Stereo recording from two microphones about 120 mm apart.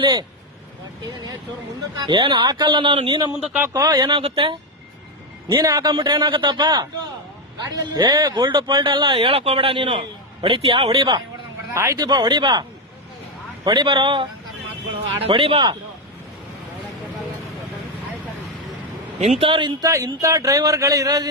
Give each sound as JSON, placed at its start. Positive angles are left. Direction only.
{"t": 0.0, "sound": "a man's voice", "side_deg": -40}
{"t": 2.0, "sound": "a man's voice", "side_deg": -45}
{"t": 3.4, "sound": "speech", "side_deg": -15}
{"t": 3.7, "sound": "a man's voice", "side_deg": -35}
{"t": 5.5, "sound": "a man's voice", "side_deg": -30}
{"t": 11.7, "sound": "speech", "side_deg": -25}
{"t": 11.9, "sound": "a man's voice", "side_deg": -35}
{"t": 13.7, "sound": "a man's voice", "side_deg": -40}
{"t": 19.4, "sound": "speech", "side_deg": -45}
{"t": 19.8, "sound": "speech", "side_deg": -25}